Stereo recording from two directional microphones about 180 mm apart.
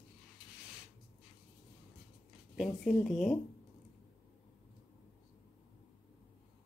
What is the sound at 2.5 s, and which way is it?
Speech, centre (ahead or behind).